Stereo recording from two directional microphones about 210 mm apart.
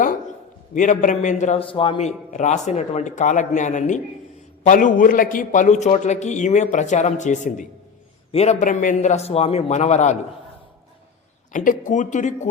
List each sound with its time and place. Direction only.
0.7 s a man's voice: 35° left (ahead or behind)
11.5 s a man's voice: 40° left (ahead or behind)